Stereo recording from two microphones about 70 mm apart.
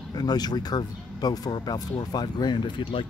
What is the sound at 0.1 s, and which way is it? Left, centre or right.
Speech, left.